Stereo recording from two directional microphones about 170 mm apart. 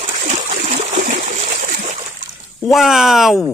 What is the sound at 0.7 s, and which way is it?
Splash, 45° right (ahead or behind).